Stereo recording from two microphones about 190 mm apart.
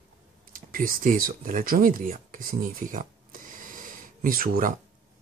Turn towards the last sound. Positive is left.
turn(degrees=-45)  # may be behind; listen again after turning